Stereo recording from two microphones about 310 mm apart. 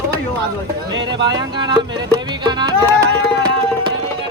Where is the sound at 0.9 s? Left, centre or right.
Centre.